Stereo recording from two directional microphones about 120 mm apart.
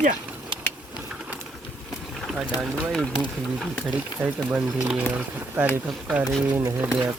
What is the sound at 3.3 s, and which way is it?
Speech, 5° right (ahead or behind).